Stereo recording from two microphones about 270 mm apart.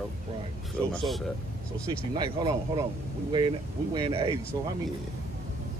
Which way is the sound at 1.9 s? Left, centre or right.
Centre.